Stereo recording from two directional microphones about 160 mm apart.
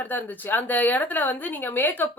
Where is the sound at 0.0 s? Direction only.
10° left (ahead or behind).